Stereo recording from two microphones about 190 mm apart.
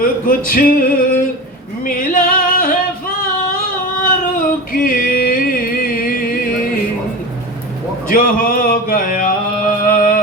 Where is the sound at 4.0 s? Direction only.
45° left (ahead or behind).